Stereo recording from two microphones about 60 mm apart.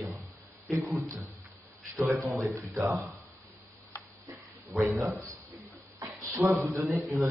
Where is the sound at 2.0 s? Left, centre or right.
Right.